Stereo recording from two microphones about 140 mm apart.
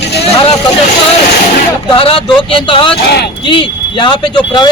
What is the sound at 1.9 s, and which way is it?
Speech, 40° left (ahead or behind).